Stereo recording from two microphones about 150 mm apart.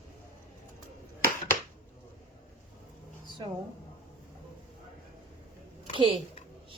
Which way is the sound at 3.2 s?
30° right (ahead or behind).